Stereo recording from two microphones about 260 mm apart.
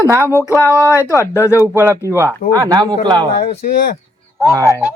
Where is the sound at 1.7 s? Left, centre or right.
Centre.